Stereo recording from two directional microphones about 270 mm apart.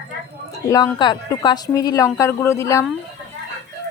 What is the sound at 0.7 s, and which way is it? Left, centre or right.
A woman's voice, centre.